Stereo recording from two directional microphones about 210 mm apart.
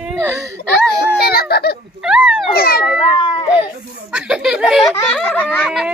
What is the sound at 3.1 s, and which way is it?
Children playing, 25° left (ahead or behind).